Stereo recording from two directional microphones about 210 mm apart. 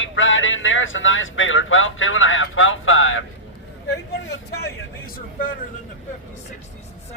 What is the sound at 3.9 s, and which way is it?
A man's voice, 50° left (ahead or behind).